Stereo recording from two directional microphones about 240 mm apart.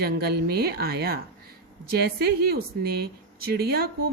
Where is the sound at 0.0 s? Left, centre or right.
Right.